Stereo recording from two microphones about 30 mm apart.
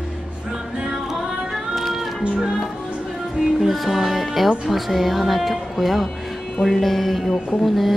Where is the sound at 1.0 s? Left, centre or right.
Centre.